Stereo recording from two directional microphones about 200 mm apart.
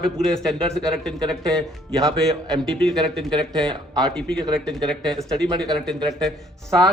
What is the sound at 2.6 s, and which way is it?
Speech, 5° left (ahead or behind).